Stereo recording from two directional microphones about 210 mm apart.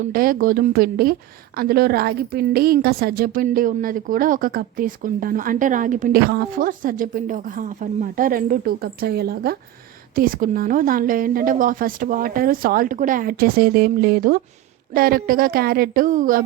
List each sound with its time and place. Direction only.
0.1 s a woman's voice: 45° right (ahead or behind)